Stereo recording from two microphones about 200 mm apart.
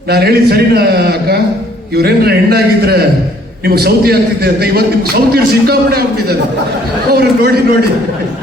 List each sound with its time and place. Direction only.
0.1 s a man's voice: 50° right (ahead or behind)
2.0 s a man's voice: 50° right (ahead or behind)